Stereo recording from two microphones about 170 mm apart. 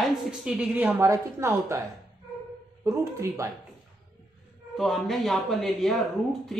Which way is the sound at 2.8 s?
20° right (ahead or behind).